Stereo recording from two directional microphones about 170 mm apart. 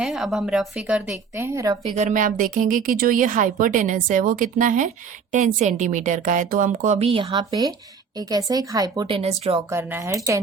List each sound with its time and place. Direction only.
0.0 s a woman's voice: centre (ahead or behind); by 1.8 s 20° right (ahead or behind)
2.0 s a woman's voice: 50° right (ahead or behind)
8.3 s speech: 20° right (ahead or behind)
9.6 s speech: 15° right (ahead or behind)